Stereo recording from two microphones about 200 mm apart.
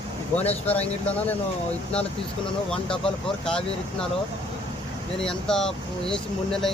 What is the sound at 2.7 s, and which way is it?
Speech, 5° left (ahead or behind).